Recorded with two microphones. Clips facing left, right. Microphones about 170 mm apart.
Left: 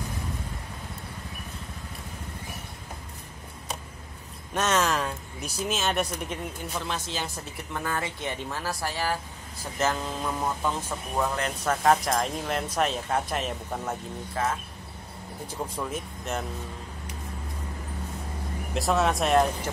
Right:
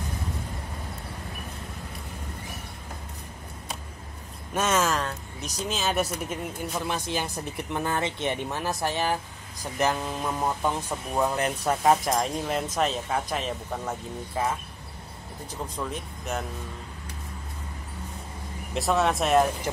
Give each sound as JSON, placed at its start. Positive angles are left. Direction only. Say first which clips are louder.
{"t": 4.6, "sound": "speech", "louder": "even", "side_deg": -5}
{"t": 6.9, "sound": "speech", "louder": "right 3 dB", "side_deg": -15}
{"t": 12.0, "sound": "speech", "louder": "right 1 dB", "side_deg": 0}
{"t": 14.3, "sound": "speech", "louder": "right 1 dB", "side_deg": -10}
{"t": 15.6, "sound": "speech", "louder": "left 1 dB", "side_deg": 5}
{"t": 18.7, "sound": "speech", "louder": "right 1 dB", "side_deg": 0}